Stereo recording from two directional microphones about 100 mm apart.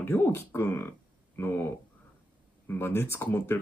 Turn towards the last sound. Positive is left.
turn(degrees=25)  # may be behind; listen again after turning